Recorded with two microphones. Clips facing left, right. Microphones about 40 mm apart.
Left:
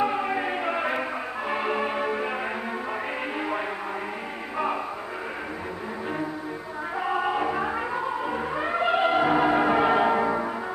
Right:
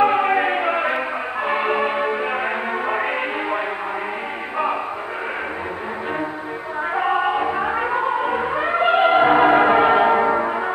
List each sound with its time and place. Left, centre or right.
0.0 s music: right
7.0 s music: right